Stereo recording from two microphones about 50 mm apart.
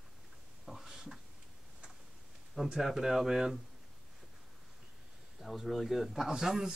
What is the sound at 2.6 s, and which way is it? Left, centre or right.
Speech, centre.